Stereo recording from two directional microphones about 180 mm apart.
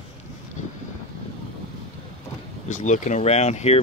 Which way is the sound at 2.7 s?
40° left (ahead or behind).